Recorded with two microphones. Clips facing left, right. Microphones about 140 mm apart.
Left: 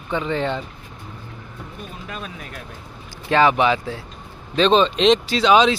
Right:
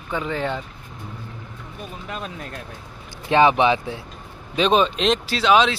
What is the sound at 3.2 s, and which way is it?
Speech, 20° right (ahead or behind).